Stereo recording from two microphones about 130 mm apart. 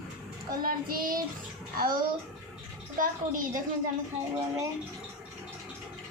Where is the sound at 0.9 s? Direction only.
90° right.